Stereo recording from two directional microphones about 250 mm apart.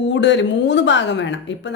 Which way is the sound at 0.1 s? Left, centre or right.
Left.